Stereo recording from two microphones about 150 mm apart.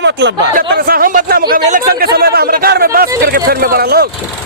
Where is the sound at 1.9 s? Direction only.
90° right.